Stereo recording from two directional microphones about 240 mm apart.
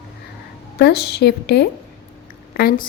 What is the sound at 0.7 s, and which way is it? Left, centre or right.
A woman's voice, left.